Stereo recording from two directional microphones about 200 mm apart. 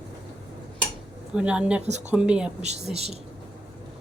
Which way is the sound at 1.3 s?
5° right (ahead or behind).